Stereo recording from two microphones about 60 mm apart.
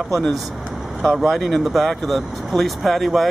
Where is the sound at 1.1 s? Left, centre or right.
Centre.